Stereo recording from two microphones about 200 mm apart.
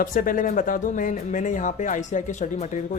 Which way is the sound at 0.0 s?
45° left (ahead or behind).